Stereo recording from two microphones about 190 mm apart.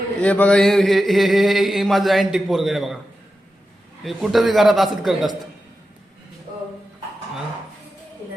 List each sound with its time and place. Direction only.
0.2 s mantra: 5° left (ahead or behind)
4.0 s mantra: centre (ahead or behind)